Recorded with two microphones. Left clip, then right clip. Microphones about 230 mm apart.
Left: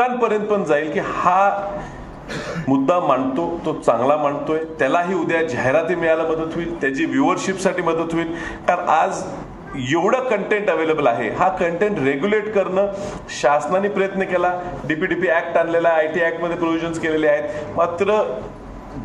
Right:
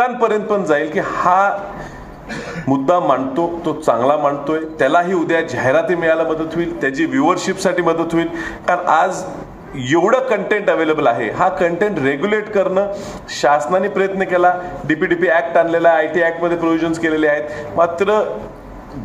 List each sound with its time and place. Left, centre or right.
0.0 s a man's voice: right
2.7 s a man's voice: right